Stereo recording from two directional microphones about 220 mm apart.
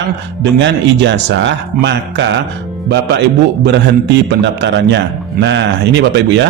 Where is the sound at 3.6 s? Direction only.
50° right (ahead or behind).